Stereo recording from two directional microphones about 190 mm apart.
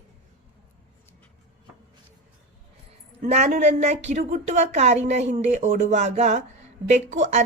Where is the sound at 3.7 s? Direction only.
35° right (ahead or behind).